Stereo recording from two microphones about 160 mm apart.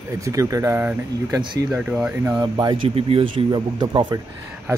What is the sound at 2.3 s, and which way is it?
Speech, 25° right (ahead or behind).